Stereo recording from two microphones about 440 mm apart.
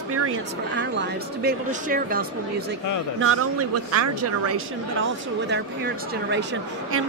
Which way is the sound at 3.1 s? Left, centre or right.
Right.